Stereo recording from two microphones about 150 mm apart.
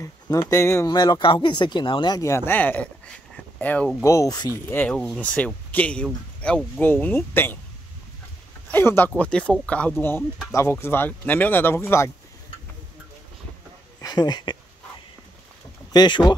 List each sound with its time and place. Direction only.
0.0 s speech: 20° left (ahead or behind)
4.0 s speech: 20° left (ahead or behind)
8.6 s speech: 15° left (ahead or behind)
14.0 s speech: 25° left (ahead or behind)
15.9 s speech: 30° left (ahead or behind)